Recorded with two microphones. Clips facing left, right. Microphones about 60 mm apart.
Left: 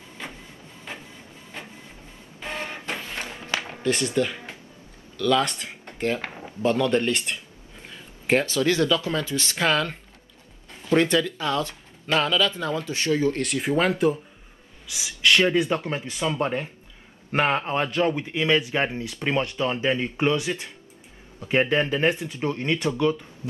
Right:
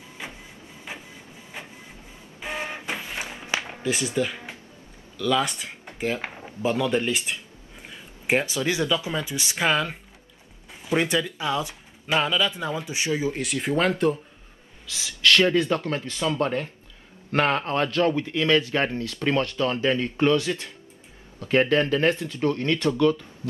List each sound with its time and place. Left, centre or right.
0.2 s printer: centre
2.4 s a sound: centre
3.7 s speech: centre
14.9 s speech: centre